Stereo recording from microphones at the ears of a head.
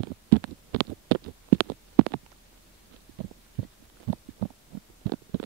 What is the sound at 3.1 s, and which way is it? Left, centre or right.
Heart sounds, right.